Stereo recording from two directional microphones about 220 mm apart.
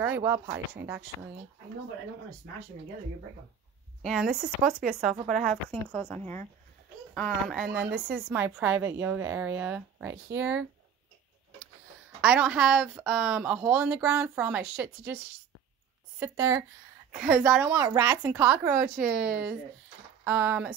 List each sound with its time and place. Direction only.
0.0 s speech: 10° right (ahead or behind)
4.0 s a woman's voice: centre (ahead or behind)
7.8 s a woman's voice: 45° right (ahead or behind)
8.3 s speech: 10° right (ahead or behind)
12.2 s speech: 5° right (ahead or behind)
16.2 s speech: 15° right (ahead or behind)